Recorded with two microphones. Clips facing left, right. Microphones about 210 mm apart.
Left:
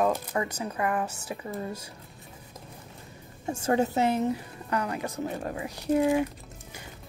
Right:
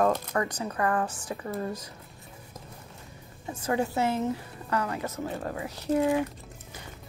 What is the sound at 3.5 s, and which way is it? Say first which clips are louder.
Speech: left 3 dB; 25° left (ahead or behind).